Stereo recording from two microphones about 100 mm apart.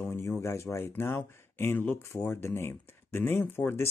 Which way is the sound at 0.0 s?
25° left (ahead or behind).